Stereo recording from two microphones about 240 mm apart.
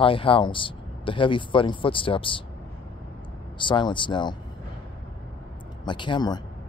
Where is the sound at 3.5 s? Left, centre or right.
Centre.